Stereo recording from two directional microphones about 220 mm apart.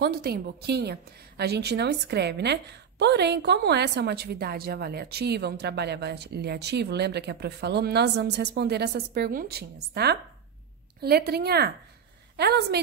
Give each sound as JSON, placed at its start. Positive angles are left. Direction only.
{"t": 0.0, "sound": "a woman's voice", "side_deg": -45}